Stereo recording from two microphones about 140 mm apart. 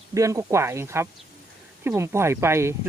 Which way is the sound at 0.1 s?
20° right (ahead or behind).